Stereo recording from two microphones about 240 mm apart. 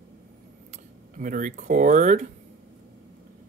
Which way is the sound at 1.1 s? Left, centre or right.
Right.